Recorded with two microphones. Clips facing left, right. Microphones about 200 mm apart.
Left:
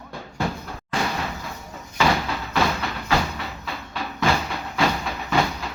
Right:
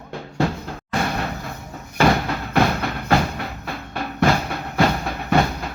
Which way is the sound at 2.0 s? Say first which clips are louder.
Right 4 dB; 55° right (ahead or behind).